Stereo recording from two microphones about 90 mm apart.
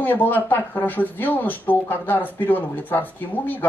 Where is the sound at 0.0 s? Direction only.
20° left (ahead or behind).